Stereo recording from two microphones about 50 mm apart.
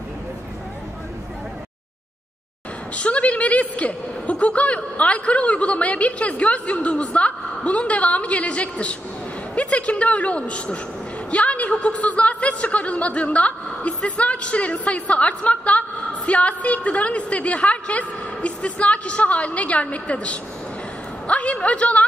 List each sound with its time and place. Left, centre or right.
3.0 s a woman's voice: left